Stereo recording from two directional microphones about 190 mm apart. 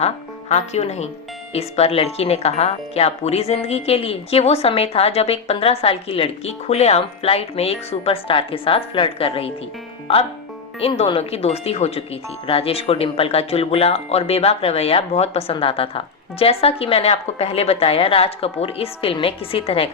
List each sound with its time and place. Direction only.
0.0 s speech: 35° left (ahead or behind)
10.8 s speech: 30° left (ahead or behind)